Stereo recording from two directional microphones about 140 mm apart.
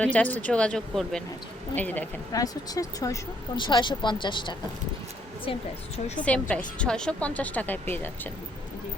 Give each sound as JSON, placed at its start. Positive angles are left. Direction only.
{"t": 0.0, "sound": "speech", "side_deg": 10}
{"t": 2.3, "sound": "speech", "side_deg": 25}
{"t": 6.5, "sound": "speech", "side_deg": 5}